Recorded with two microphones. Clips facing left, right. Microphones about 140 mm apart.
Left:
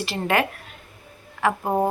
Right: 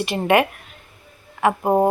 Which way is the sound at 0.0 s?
15° right (ahead or behind).